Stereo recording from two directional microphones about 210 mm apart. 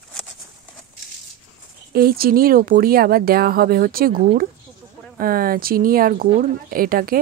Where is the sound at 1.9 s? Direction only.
45° right (ahead or behind).